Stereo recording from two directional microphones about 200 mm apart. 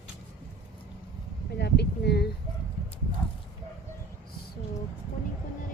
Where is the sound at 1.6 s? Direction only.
55° left (ahead or behind).